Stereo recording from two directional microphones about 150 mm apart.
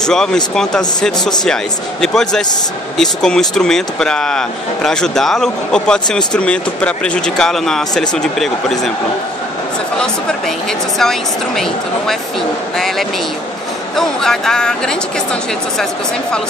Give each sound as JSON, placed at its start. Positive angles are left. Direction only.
{"t": 0.0, "sound": "speech", "side_deg": 5}
{"t": 9.9, "sound": "speech", "side_deg": 5}